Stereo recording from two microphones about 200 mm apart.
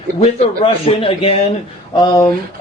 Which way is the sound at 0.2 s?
25° left (ahead or behind).